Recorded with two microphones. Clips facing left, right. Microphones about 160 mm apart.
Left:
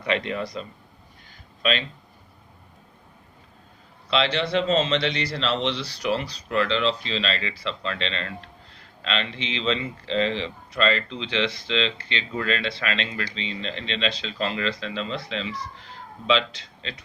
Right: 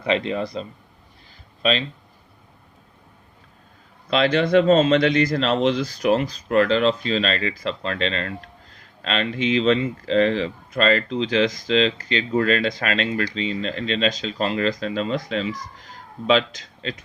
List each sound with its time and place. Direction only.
0.0 s a man's voice: 30° right (ahead or behind)
4.1 s speech: 45° right (ahead or behind)